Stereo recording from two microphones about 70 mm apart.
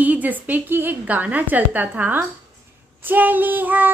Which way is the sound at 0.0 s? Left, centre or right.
Right.